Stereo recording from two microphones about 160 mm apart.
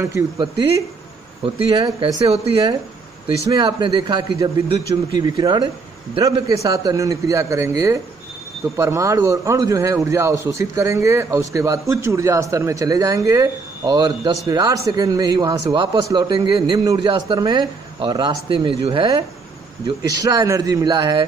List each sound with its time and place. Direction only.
0.0 s a man's voice: 25° right (ahead or behind)
2.2 s speech: 40° right (ahead or behind)
3.3 s a man's voice: 25° right (ahead or behind)